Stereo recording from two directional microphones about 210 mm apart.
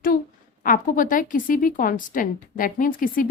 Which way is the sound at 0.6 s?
40° left (ahead or behind).